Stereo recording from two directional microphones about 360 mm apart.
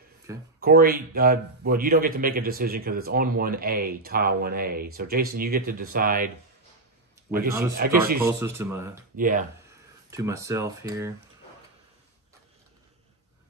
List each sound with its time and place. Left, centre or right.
0.6 s a man's voice: right
8.3 s speech: centre
9.1 s a man's voice: right
10.1 s speech: centre